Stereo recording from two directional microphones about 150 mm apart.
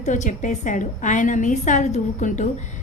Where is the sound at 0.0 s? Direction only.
55° left (ahead or behind).